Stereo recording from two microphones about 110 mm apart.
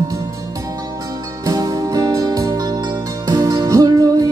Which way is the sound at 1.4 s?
35° right (ahead or behind).